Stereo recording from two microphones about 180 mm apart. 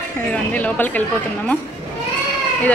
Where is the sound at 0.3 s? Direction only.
10° left (ahead or behind).